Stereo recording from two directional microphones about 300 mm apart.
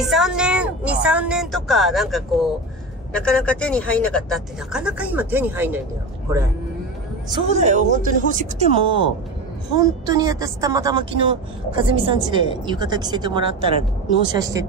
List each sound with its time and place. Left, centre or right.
0.0 s speech: centre
7.2 s a woman's voice: centre